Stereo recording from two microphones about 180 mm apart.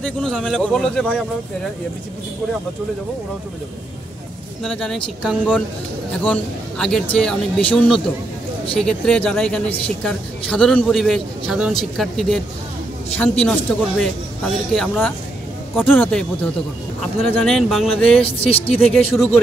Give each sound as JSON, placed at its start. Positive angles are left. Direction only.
{"t": 0.0, "sound": "speech", "side_deg": 5}
{"t": 4.6, "sound": "speech", "side_deg": 5}
{"t": 18.2, "sound": "speech", "side_deg": 30}